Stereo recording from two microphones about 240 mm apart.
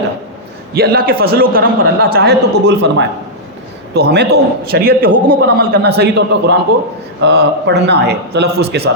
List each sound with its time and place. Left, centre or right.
0.7 s a man's voice: right